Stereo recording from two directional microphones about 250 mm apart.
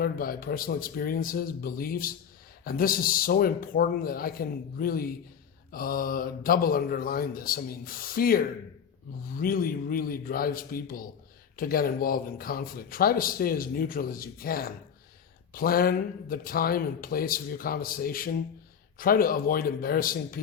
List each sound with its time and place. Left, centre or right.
0.0 s speech: left